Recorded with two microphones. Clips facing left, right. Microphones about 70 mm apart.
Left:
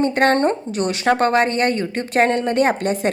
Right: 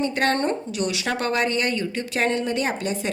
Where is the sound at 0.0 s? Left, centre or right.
Left.